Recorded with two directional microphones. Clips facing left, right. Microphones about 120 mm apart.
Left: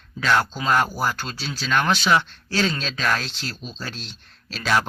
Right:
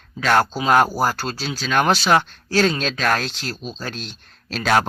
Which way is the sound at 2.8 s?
55° right (ahead or behind).